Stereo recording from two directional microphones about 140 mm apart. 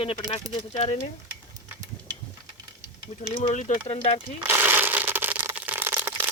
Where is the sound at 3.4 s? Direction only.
55° left (ahead or behind).